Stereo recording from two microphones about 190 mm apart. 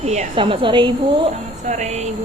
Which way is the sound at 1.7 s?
35° right (ahead or behind).